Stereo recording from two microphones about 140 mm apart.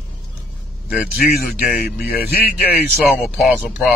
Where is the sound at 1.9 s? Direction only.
90° left.